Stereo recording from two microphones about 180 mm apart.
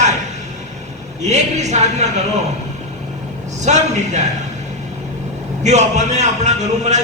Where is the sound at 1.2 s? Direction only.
40° right (ahead or behind).